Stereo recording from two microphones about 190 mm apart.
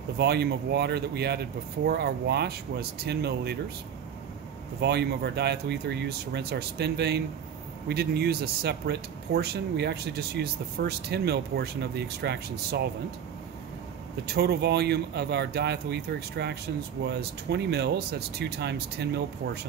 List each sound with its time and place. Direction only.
0.2 s speech: 60° right (ahead or behind)
4.7 s speech: 60° right (ahead or behind)
14.2 s speech: 60° right (ahead or behind)